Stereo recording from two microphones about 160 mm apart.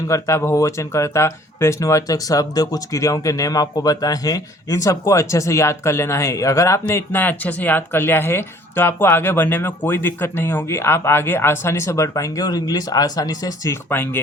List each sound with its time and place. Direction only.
0.1 s speech: 15° left (ahead or behind)